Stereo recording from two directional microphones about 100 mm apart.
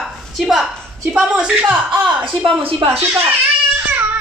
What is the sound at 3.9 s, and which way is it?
Baby cry, 15° right (ahead or behind).